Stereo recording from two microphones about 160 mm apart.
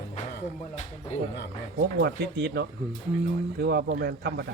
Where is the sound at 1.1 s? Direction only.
45° left (ahead or behind).